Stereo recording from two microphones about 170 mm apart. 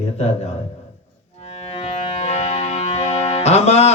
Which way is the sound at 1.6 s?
40° left (ahead or behind).